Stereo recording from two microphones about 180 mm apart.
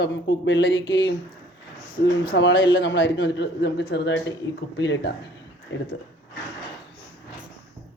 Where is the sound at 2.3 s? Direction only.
85° left.